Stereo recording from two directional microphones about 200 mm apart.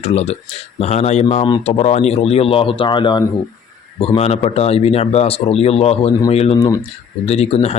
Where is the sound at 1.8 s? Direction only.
35° left (ahead or behind).